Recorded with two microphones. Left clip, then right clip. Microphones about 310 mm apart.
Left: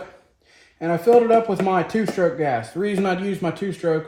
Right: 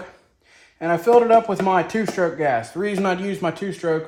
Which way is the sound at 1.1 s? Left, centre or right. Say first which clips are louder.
Right 1 dB; centre.